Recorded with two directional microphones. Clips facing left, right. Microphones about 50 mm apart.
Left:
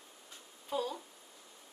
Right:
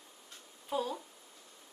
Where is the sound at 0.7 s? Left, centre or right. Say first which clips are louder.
Right 1 dB; centre.